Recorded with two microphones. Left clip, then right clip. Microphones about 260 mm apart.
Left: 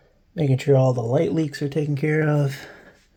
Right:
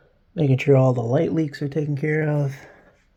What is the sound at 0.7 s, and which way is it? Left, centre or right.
Speech, centre.